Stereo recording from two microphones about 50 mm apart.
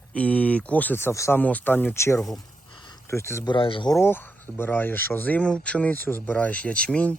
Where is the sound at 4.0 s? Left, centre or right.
Left.